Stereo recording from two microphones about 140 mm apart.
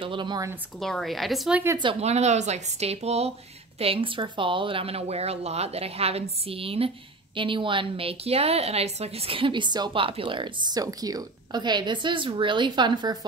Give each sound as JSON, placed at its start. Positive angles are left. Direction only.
{"t": 0.0, "sound": "a woman's voice", "side_deg": -35}
{"t": 0.7, "sound": "speech", "side_deg": 0}
{"t": 2.0, "sound": "a woman's voice", "side_deg": -50}